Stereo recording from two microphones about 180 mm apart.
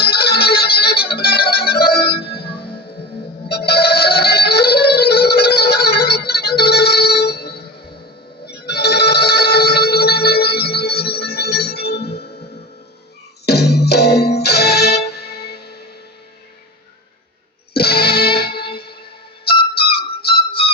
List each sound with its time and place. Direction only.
0.0 s music: 60° left (ahead or behind)
3.5 s music: 60° left (ahead or behind)
13.4 s music: 65° left (ahead or behind)
17.7 s music: 60° left (ahead or behind)
20.0 s music: 30° left (ahead or behind)